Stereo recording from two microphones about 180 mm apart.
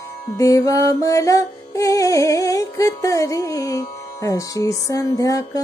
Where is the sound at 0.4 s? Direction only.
20° left (ahead or behind).